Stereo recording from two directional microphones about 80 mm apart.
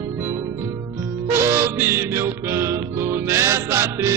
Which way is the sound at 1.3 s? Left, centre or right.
Right.